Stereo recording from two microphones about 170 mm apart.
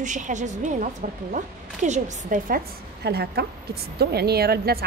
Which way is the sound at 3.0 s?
70° right (ahead or behind).